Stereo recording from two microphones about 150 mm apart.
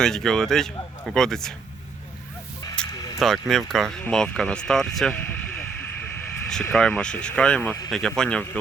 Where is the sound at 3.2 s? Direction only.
Centre (ahead or behind).